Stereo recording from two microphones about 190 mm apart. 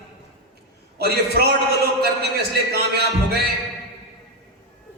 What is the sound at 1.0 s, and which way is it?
Speech, 55° right (ahead or behind).